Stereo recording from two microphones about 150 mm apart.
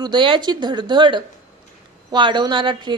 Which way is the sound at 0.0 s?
30° right (ahead or behind).